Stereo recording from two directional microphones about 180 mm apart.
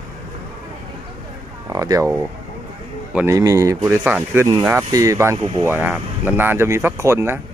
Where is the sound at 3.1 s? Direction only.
15° right (ahead or behind).